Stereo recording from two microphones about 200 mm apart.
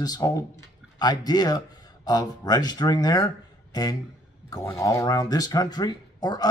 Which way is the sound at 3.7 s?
20° left (ahead or behind).